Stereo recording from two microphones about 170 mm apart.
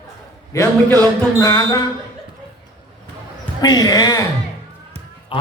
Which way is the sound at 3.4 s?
25° left (ahead or behind).